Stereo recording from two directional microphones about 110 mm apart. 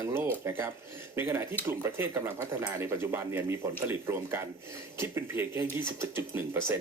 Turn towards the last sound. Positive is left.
turn(degrees=-25)  # may be behind; listen again after turning